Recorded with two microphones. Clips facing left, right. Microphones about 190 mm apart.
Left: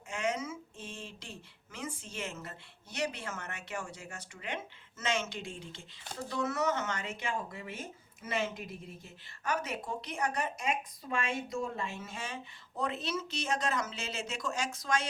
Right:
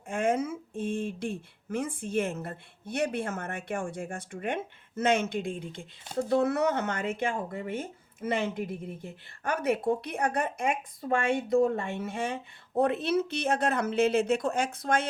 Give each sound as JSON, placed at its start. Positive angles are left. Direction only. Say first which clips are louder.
{"t": 0.1, "sound": "speech", "louder": "right 7 dB", "side_deg": -55}